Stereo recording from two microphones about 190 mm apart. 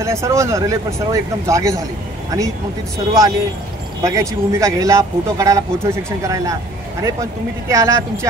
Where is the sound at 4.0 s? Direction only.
15° right (ahead or behind).